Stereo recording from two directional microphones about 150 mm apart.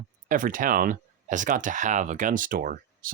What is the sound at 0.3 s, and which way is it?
Speech, 65° right (ahead or behind).